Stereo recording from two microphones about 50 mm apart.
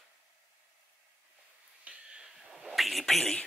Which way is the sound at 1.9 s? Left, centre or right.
Right.